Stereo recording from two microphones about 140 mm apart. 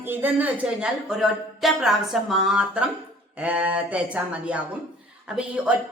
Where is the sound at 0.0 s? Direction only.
15° right (ahead or behind).